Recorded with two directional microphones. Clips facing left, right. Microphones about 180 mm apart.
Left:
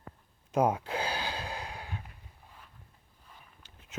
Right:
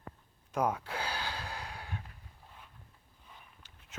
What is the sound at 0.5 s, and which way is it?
Gasp, 25° left (ahead or behind).